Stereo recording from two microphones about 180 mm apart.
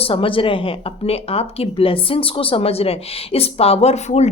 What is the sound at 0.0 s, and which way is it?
Speech, 30° left (ahead or behind).